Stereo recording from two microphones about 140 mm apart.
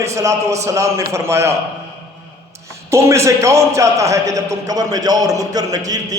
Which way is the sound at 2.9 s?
20° right (ahead or behind).